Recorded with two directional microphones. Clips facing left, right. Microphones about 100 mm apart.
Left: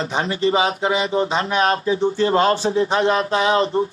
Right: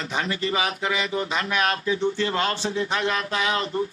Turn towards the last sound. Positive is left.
turn(degrees=30)  # may be behind; listen again after turning